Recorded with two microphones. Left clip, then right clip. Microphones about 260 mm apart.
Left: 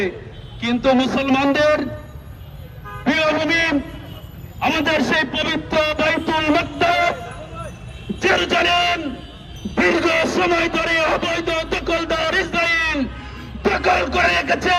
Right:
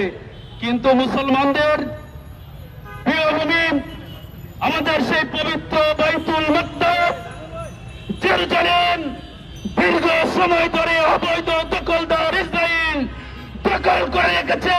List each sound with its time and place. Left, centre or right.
0.6 s speech: right
3.0 s speech: right
8.2 s speech: right